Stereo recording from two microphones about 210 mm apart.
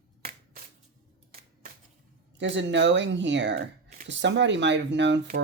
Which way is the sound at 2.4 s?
55° right (ahead or behind).